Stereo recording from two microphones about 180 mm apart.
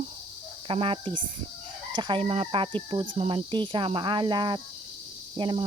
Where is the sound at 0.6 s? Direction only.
30° right (ahead or behind).